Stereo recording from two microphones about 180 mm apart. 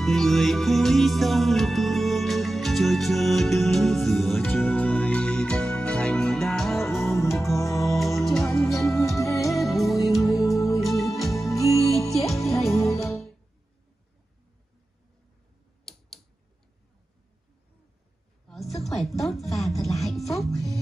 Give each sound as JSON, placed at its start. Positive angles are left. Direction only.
{"t": 0.0, "sound": "music", "side_deg": 0}
{"t": 7.1, "sound": "music", "side_deg": 15}
{"t": 8.0, "sound": "music", "side_deg": 0}
{"t": 9.2, "sound": "music", "side_deg": 15}
{"t": 9.5, "sound": "music", "side_deg": 0}
{"t": 10.5, "sound": "music", "side_deg": 20}
{"t": 10.8, "sound": "music", "side_deg": 0}
{"t": 11.5, "sound": "music", "side_deg": 20}
{"t": 12.2, "sound": "music", "side_deg": 0}
{"t": 18.5, "sound": "music", "side_deg": 0}